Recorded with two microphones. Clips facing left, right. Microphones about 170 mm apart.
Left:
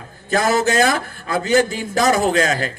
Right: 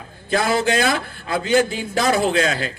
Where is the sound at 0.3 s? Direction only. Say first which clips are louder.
Left 2 dB; 45° left (ahead or behind).